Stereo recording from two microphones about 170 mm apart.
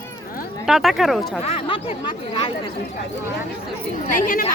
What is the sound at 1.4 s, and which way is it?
Speech, 35° left (ahead or behind).